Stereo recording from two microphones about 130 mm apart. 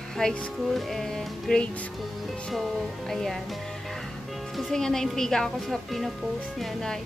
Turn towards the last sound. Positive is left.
turn(degrees=0)  # may be behind; listen again after turning